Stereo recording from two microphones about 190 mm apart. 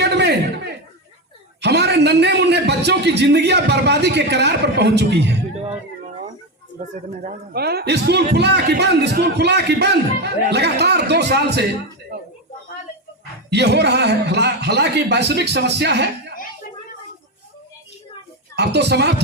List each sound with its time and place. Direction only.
0.0 s chuckle: 65° right (ahead or behind)
1.6 s a man's voice: 60° right (ahead or behind)
6.7 s a man's voice: 45° right (ahead or behind); by 11.6 s 60° right (ahead or behind)
13.5 s a man's voice: 60° right (ahead or behind)
18.5 s a man's voice: 60° right (ahead or behind)